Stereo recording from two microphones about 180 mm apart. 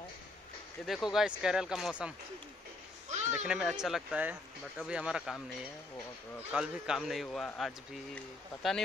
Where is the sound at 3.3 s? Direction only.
5° right (ahead or behind).